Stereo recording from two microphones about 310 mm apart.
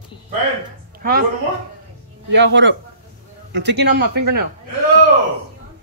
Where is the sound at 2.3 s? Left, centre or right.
Right.